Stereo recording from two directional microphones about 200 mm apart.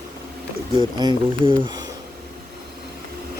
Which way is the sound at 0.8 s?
25° right (ahead or behind).